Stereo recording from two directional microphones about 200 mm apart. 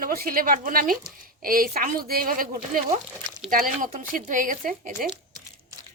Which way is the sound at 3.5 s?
40° right (ahead or behind).